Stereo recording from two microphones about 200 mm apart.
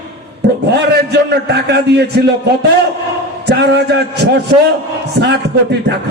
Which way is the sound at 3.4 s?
55° right (ahead or behind).